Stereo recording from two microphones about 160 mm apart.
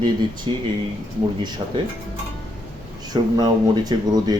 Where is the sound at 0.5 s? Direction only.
30° right (ahead or behind).